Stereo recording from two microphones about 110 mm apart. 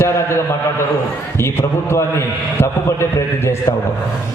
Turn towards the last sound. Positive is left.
turn(degrees=25)  # may be behind; listen again after turning